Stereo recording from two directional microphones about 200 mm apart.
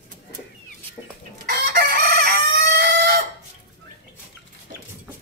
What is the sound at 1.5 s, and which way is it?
Chicken, 50° right (ahead or behind).